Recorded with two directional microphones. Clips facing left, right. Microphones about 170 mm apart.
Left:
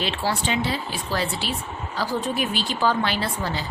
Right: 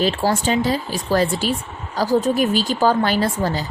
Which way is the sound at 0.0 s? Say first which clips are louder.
Right 7 dB; 40° right (ahead or behind).